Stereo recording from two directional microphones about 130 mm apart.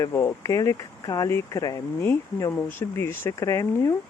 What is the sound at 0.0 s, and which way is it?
Speech, 20° left (ahead or behind).